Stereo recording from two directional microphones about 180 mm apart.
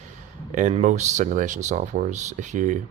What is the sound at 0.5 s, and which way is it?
Speech, 40° right (ahead or behind).